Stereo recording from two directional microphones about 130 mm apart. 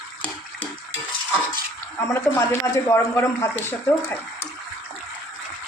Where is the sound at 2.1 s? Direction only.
20° left (ahead or behind).